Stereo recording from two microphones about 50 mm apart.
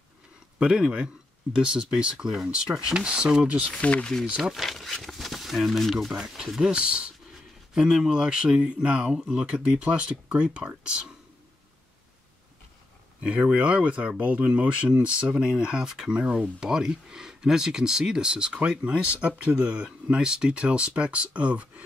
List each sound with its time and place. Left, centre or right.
0.6 s speech: centre
3.8 s speech: left
4.4 s speech: centre
6.2 s speech: centre
13.2 s speech: right; by 16.2 s centre
16.2 s speech: right